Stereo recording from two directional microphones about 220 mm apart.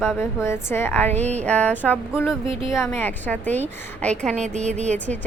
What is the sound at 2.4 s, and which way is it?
Speech, 25° right (ahead or behind).